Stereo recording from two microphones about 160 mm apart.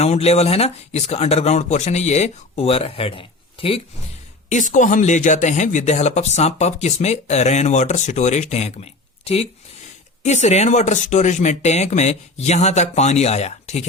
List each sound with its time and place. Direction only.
0.0 s speech: 40° left (ahead or behind)
4.4 s speech: 50° left (ahead or behind)